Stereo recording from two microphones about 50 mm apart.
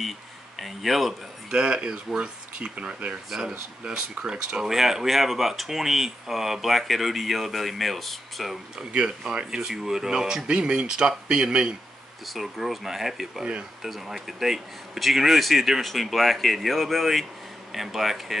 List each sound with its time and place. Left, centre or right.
0.6 s speech: centre
1.5 s speech: centre
3.3 s speech: centre